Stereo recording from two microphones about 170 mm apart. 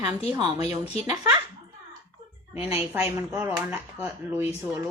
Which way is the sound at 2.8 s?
15° right (ahead or behind).